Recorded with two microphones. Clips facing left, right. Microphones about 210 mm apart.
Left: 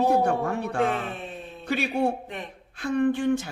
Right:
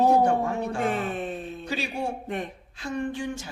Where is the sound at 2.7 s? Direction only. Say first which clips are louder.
Left 7 dB; 55° left (ahead or behind).